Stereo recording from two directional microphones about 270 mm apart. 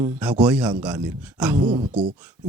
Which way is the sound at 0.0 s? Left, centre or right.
Centre.